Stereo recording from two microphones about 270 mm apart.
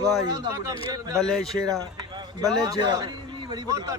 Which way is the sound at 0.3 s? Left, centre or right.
Centre.